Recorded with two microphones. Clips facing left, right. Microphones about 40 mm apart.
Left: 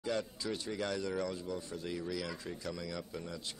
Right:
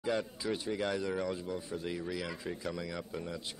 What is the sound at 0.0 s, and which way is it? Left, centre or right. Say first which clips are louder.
Speech: right 3 dB; centre.